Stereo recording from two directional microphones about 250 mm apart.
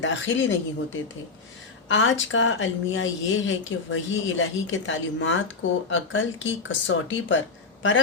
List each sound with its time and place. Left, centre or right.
0.0 s a woman's voice: left
1.9 s a woman's voice: left